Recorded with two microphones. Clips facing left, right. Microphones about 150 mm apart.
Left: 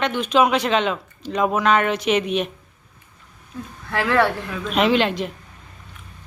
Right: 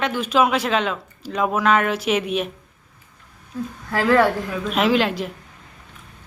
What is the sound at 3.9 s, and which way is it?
Speech, 40° right (ahead or behind).